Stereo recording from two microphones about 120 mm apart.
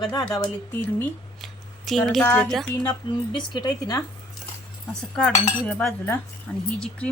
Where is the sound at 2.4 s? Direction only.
5° left (ahead or behind).